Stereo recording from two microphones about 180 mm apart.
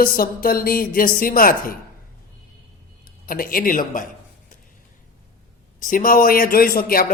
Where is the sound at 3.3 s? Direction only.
55° left (ahead or behind).